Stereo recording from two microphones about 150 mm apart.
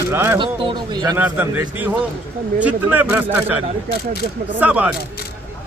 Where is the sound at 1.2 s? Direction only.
10° right (ahead or behind).